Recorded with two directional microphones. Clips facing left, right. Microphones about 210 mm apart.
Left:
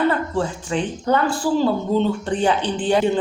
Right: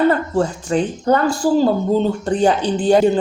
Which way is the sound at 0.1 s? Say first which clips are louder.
Right 4 dB; 40° right (ahead or behind).